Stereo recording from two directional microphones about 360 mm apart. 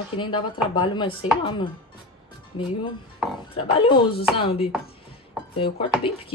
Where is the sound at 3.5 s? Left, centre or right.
Centre.